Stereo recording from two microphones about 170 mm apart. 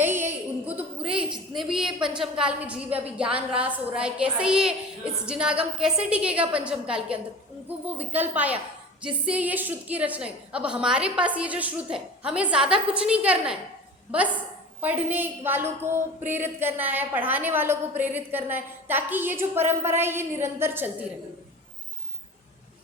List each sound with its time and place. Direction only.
0.0 s a sound: 15° right (ahead or behind)
1.5 s a woman's voice: 5° right (ahead or behind)
14.8 s a woman's voice: 10° right (ahead or behind)